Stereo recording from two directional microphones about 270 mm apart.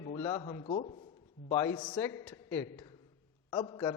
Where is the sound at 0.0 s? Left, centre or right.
Centre.